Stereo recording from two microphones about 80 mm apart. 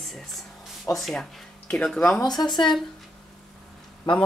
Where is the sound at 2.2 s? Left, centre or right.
Left.